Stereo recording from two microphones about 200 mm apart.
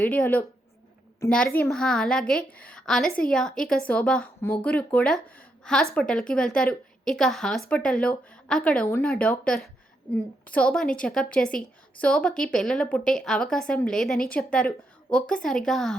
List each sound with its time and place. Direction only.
0.1 s a woman's voice: 10° left (ahead or behind)